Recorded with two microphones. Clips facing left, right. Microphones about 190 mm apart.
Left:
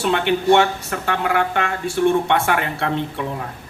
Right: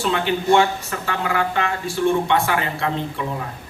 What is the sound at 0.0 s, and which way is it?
A man's voice, 60° left (ahead or behind).